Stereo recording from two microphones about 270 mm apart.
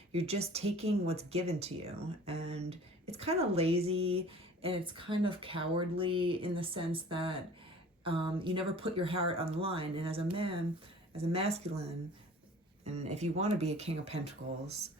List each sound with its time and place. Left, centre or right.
0.1 s speech: right